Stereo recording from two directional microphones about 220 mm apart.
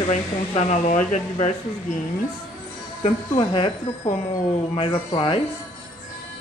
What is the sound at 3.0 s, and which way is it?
Speech, 25° left (ahead or behind).